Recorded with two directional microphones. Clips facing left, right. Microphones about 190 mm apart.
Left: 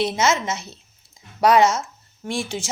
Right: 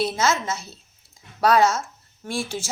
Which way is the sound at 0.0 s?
20° left (ahead or behind).